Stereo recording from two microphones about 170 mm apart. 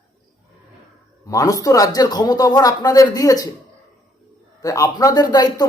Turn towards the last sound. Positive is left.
turn(degrees=25)  # may be behind; listen again after turning